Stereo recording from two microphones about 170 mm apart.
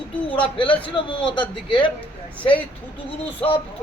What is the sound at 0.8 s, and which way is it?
A man's voice, 30° left (ahead or behind).